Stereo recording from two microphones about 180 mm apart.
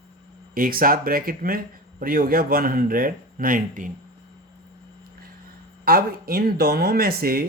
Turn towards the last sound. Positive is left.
turn(degrees=-55)  # may be behind; listen again after turning